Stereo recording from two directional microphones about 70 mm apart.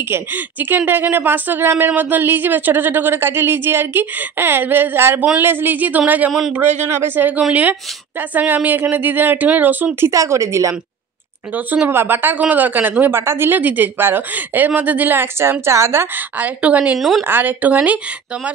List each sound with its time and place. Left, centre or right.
0.0 s speech: right
6.8 s speech: right
10.1 s a woman's voice: right
11.5 s speech: right
13.1 s a woman's voice: right
16.2 s speech: right
17.2 s speech: right